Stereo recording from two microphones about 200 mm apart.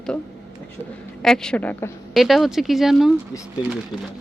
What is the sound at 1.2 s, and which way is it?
Speech, 5° left (ahead or behind).